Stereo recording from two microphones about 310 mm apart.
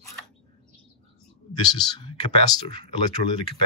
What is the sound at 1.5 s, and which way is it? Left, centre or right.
Speech, centre.